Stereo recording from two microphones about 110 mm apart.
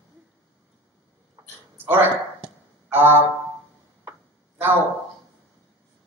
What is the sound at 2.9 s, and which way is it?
Speech, 20° right (ahead or behind).